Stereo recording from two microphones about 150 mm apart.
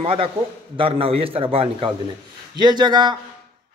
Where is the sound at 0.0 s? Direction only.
40° right (ahead or behind).